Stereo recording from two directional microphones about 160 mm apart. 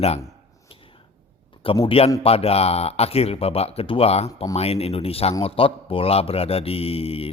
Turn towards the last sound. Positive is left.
turn(degrees=35)  # may be behind; listen again after turning